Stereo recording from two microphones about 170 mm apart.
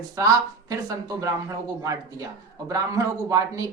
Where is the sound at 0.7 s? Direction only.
20° right (ahead or behind).